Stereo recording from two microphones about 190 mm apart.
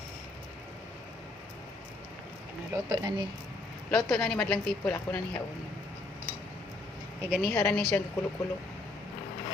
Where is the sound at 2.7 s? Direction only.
20° right (ahead or behind).